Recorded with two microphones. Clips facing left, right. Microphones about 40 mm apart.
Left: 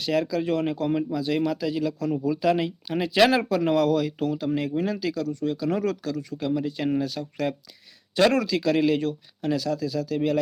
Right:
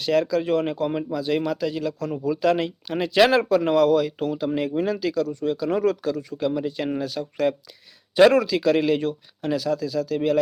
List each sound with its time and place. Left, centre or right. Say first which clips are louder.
0.0 s speech: right 3 dB; centre
4.9 s speech: right 3 dB; centre
6.7 s speech: even; centre